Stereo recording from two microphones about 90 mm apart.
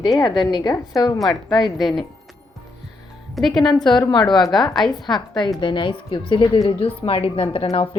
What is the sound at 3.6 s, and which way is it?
Speech, 55° left (ahead or behind).